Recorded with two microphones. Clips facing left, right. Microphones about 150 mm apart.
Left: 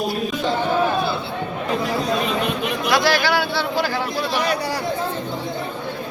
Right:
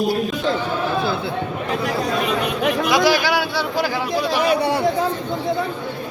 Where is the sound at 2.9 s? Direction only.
10° right (ahead or behind).